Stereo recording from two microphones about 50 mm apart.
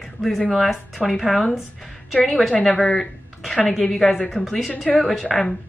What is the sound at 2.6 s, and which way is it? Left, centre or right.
Speech, centre.